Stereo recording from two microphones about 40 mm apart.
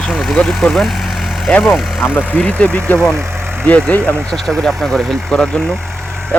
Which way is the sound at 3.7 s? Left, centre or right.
Left.